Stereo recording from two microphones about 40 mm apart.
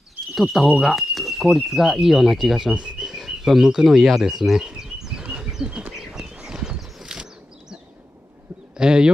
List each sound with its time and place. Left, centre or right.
0.3 s speech: centre
2.7 s bird vocalization: right
3.0 s speech: centre
4.2 s a sound: centre
5.2 s bird: right
5.9 s horse: centre
7.1 s a sound: right
8.7 s speech: centre